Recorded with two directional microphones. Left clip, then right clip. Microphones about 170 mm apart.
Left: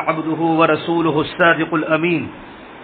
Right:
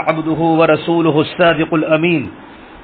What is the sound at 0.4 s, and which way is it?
A man's voice, 40° right (ahead or behind).